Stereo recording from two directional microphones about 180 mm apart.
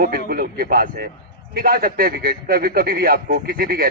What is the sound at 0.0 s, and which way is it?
A man's voice, 55° right (ahead or behind).